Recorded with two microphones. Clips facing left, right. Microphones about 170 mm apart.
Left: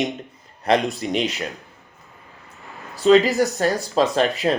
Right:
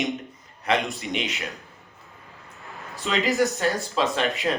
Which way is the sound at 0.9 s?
40° left (ahead or behind).